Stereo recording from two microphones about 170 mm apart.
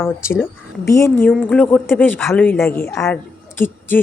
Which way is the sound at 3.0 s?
10° left (ahead or behind).